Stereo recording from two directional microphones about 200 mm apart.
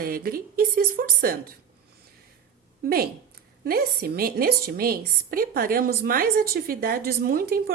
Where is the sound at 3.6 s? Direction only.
50° right (ahead or behind).